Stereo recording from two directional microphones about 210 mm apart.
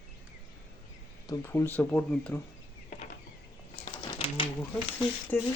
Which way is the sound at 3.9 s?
20° left (ahead or behind).